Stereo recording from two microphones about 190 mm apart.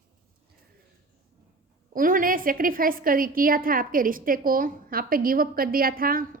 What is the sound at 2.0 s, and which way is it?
A woman's voice, 45° right (ahead or behind).